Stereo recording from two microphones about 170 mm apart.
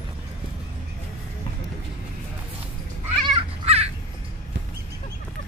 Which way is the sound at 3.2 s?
35° right (ahead or behind).